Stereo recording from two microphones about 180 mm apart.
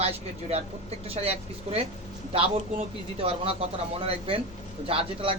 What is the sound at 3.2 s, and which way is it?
Speech, 30° right (ahead or behind).